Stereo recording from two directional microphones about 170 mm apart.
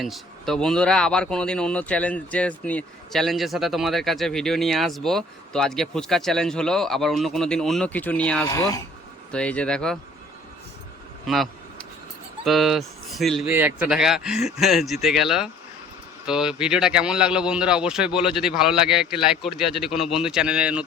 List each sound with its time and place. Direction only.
0.0 s speech: centre (ahead or behind)
8.4 s speech: 20° left (ahead or behind)
9.3 s speech: 5° left (ahead or behind)
12.5 s speech: centre (ahead or behind)
13.5 s speech: 10° right (ahead or behind)